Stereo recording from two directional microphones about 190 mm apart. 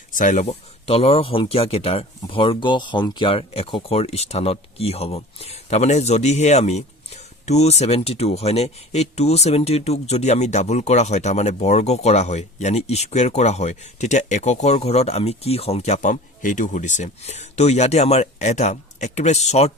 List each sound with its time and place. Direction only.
0.1 s speech: 45° left (ahead or behind)